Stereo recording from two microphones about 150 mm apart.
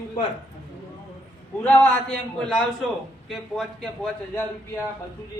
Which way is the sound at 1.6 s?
10° left (ahead or behind).